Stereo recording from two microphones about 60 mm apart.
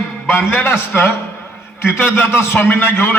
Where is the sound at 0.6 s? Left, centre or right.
Left.